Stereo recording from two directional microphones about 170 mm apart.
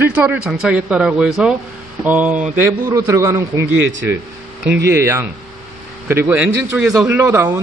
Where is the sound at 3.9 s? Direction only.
90° right.